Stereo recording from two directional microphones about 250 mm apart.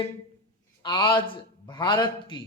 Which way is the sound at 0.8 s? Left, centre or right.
Centre.